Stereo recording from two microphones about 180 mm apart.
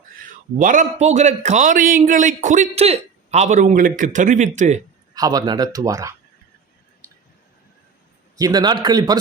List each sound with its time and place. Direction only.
0.6 s a man's voice: 45° right (ahead or behind)
5.1 s speech: 20° right (ahead or behind)
8.4 s speech: 20° right (ahead or behind)